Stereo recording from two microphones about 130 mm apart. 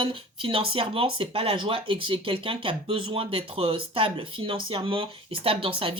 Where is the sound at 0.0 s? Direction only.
45° right (ahead or behind).